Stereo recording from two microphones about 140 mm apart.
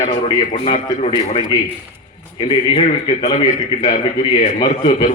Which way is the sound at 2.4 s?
45° left (ahead or behind).